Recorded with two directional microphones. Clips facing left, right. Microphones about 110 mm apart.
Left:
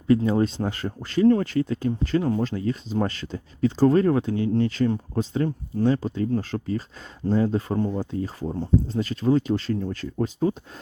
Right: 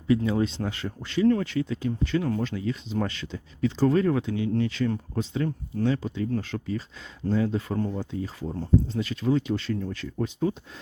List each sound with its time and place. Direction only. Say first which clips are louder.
0.3 s speech: left 3 dB; 45° left (ahead or behind)
7.9 s speech: left 4 dB; 40° left (ahead or behind)